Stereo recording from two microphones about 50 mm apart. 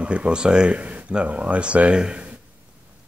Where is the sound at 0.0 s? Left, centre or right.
Right.